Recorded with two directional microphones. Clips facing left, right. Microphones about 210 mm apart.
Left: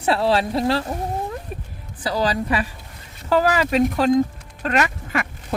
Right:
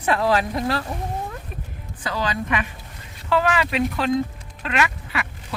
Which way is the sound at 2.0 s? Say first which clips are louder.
Left 4 dB; 35° left (ahead or behind).